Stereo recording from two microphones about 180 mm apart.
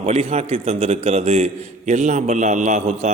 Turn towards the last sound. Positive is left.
turn(degrees=-40)  # may be behind; listen again after turning